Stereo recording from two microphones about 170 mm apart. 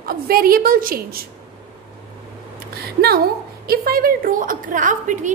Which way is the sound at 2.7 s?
65° right (ahead or behind).